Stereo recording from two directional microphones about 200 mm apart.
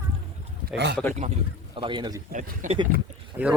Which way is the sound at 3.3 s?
10° right (ahead or behind).